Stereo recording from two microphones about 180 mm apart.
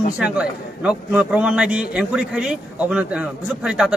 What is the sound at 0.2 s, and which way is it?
A man's voice, 5° right (ahead or behind).